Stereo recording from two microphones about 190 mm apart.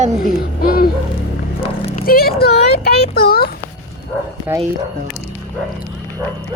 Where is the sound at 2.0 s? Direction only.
50° left (ahead or behind).